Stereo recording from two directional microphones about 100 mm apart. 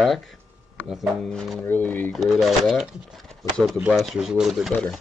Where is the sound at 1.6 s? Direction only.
20° left (ahead or behind).